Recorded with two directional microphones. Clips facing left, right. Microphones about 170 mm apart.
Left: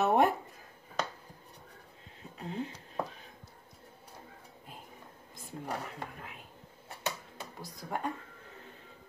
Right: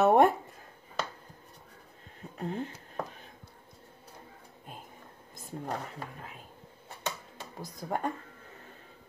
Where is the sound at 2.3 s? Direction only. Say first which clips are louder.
Right 5 dB; 50° right (ahead or behind).